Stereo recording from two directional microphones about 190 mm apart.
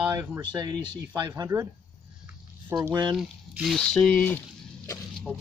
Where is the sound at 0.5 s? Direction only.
20° right (ahead or behind).